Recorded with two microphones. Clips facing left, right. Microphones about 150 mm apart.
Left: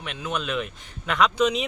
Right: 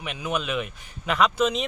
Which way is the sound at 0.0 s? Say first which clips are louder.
Right 1 dB; 5° right (ahead or behind).